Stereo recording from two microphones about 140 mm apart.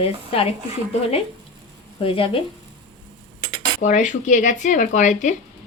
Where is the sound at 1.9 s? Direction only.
40° left (ahead or behind).